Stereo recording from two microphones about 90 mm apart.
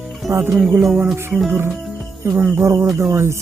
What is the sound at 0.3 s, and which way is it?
Music, 30° right (ahead or behind).